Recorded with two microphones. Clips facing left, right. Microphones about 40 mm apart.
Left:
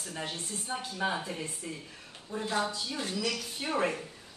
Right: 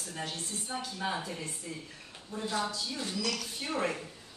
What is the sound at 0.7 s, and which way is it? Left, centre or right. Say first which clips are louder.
Speech: left 2 dB; centre.